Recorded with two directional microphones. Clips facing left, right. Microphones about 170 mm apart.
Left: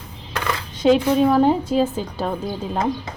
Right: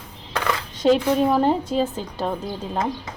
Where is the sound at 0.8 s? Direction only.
Centre (ahead or behind).